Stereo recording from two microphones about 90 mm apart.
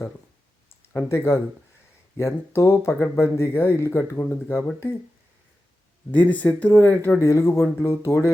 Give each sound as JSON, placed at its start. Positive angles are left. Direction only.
{"t": 0.9, "sound": "speech", "side_deg": 30}
{"t": 6.1, "sound": "speech", "side_deg": 15}